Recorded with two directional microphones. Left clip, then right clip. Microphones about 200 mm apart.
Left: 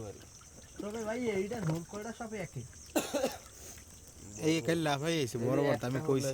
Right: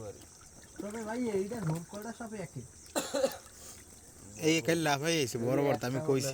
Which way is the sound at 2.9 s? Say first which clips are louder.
Right 1 dB; 30° left (ahead or behind).